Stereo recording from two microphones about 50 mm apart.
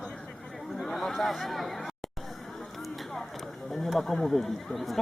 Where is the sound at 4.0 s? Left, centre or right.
Centre.